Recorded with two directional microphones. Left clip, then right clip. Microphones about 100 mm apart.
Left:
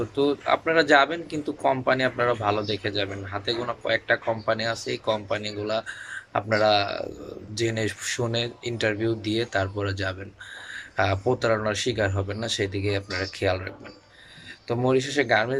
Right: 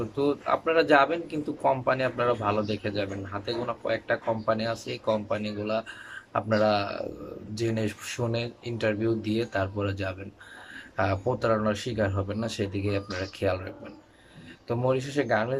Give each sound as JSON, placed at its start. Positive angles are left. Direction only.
{"t": 0.2, "sound": "a man's voice", "side_deg": -15}